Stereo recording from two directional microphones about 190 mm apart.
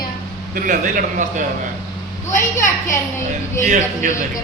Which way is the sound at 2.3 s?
15° left (ahead or behind).